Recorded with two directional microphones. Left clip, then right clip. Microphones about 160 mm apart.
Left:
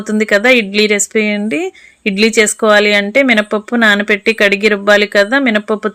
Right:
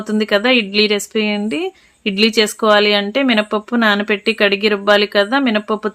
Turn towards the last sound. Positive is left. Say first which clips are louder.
# left 4 dB
turn(degrees=25)  # may be behind; listen again after turning